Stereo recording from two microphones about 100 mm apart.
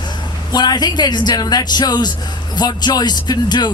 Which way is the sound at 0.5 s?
45° left (ahead or behind).